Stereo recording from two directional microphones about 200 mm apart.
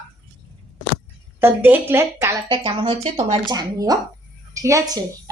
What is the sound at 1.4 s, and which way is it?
Speech, 10° right (ahead or behind).